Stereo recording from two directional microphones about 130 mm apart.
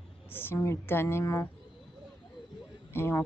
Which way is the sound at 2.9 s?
15° left (ahead or behind).